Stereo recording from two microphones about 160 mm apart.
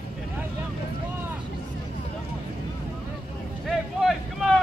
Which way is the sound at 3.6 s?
Centre (ahead or behind).